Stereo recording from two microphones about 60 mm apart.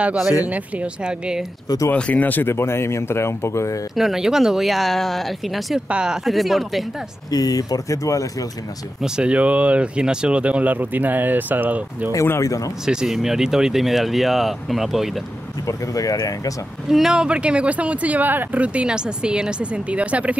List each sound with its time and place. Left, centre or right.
0.5 s speech: centre
2.0 s speech: left
2.4 s speech: left
3.9 s speech: centre
5.9 s speech: centre
6.2 s speech: centre
7.2 s speech: left
9.0 s speech: centre
12.4 s speech: left
12.8 s speech: centre
15.6 s speech: left
16.9 s speech: centre